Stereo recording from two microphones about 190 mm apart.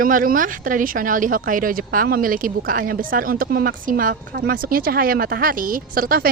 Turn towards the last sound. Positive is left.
turn(degrees=-50)  # may be behind; listen again after turning